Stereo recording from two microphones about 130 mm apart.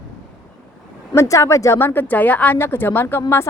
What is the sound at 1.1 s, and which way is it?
A woman's voice, 25° left (ahead or behind).